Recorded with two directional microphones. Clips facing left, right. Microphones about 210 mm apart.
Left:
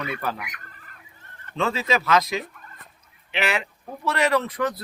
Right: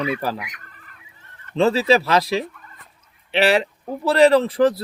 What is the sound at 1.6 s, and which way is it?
Speech, 35° right (ahead or behind).